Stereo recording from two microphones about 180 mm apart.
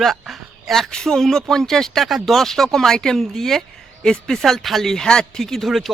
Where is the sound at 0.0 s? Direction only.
Centre (ahead or behind).